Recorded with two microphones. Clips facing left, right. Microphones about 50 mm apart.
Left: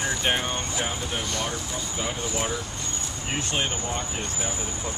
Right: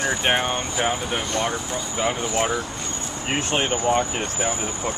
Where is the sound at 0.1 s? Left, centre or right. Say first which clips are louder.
Right 4 dB; right.